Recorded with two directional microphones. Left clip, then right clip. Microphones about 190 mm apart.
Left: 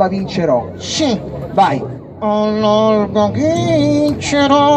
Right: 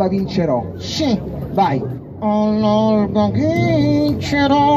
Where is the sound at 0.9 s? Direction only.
5° left (ahead or behind).